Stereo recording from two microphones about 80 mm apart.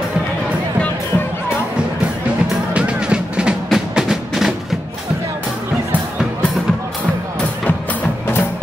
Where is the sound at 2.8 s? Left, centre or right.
Centre.